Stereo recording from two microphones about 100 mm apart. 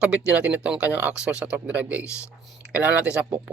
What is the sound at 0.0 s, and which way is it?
Speech, 10° right (ahead or behind).